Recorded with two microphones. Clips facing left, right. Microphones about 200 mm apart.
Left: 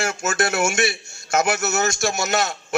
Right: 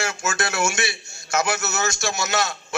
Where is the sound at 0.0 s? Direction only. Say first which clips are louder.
Left 3 dB; 50° left (ahead or behind).